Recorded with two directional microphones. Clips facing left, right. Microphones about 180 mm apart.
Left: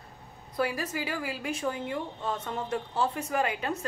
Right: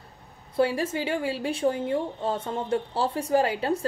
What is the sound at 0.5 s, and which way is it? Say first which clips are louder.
A woman's voice: right 6 dB; 30° right (ahead or behind).